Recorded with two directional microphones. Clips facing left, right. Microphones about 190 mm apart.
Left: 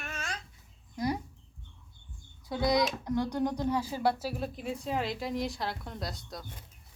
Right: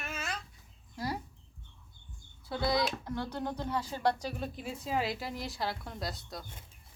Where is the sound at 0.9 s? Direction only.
20° left (ahead or behind).